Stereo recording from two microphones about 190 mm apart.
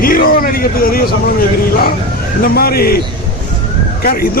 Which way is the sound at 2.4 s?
55° left (ahead or behind).